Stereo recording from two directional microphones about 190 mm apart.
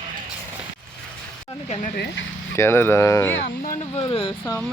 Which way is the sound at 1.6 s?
40° left (ahead or behind).